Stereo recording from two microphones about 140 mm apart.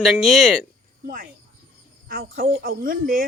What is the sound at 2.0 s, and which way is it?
Speech, 90° right.